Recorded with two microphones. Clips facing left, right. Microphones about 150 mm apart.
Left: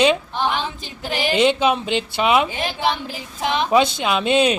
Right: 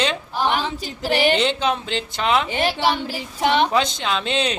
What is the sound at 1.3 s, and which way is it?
Speech, 10° left (ahead or behind).